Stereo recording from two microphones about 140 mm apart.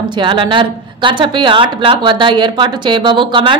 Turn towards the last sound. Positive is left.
turn(degrees=-35)  # may be behind; listen again after turning